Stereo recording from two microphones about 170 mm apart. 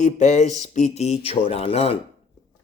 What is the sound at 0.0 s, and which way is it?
A man's voice, 45° left (ahead or behind).